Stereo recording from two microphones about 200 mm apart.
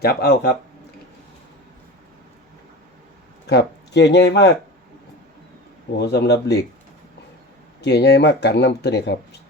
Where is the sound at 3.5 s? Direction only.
60° left (ahead or behind).